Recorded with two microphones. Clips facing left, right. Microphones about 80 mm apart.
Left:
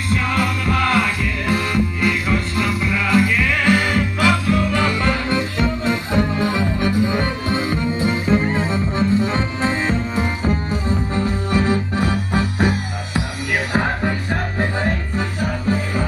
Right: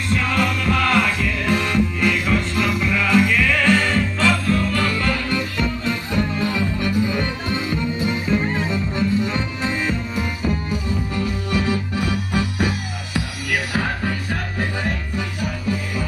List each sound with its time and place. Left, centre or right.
0.1 s music: centre; by 15.8 s left